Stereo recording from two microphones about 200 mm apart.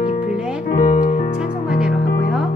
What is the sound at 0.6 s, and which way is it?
Music, 40° left (ahead or behind).